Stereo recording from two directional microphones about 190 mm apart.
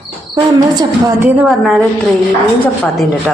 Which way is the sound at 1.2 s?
5° right (ahead or behind).